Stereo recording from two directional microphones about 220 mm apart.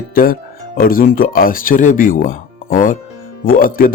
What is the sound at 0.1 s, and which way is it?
Speech, 40° left (ahead or behind).